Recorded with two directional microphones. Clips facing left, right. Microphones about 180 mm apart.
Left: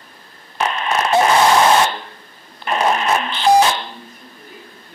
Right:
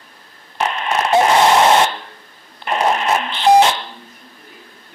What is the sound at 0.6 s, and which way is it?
Radio, 20° right (ahead or behind).